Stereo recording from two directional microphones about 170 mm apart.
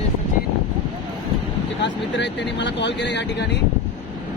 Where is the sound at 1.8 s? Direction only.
90° left.